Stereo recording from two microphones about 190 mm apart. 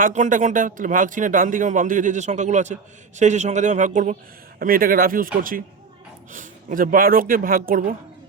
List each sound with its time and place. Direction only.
0.0 s a man's voice: 45° right (ahead or behind)